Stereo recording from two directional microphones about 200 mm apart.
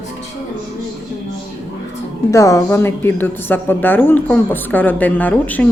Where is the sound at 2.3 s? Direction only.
15° left (ahead or behind).